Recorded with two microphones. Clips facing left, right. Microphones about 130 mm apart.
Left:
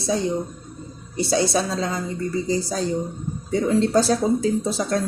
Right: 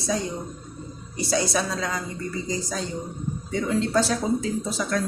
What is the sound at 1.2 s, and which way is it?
A woman's voice, 30° left (ahead or behind).